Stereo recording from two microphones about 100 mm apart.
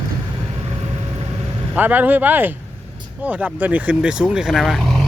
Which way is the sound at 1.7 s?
15° right (ahead or behind).